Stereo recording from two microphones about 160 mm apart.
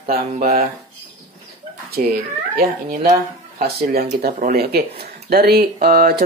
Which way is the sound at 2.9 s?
65° right (ahead or behind).